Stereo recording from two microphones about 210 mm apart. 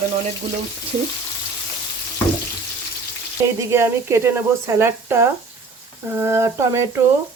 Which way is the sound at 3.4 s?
10° right (ahead or behind).